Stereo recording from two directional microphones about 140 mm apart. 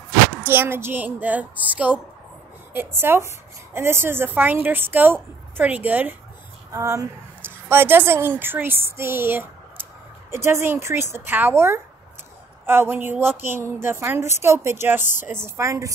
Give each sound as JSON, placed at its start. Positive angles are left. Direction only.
{"t": 0.5, "sound": "a woman's voice", "side_deg": -15}